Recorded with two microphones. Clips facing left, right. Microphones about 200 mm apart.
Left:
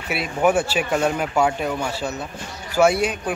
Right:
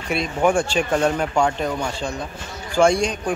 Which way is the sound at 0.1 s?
5° left (ahead or behind).